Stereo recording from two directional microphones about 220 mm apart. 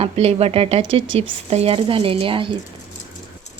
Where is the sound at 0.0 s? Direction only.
25° right (ahead or behind).